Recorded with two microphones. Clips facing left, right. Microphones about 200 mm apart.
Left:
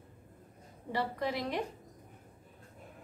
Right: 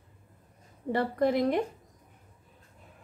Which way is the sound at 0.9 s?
50° right (ahead or behind).